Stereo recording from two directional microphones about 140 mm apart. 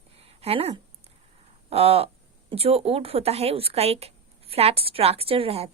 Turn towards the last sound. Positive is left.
turn(degrees=-45)  # may be behind; listen again after turning